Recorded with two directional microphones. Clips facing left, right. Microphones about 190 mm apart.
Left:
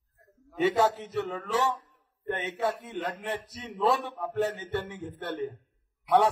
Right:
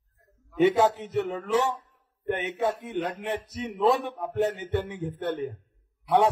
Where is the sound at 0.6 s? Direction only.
20° right (ahead or behind).